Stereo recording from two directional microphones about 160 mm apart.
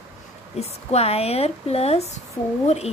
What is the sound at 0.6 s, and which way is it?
Speech, 40° left (ahead or behind).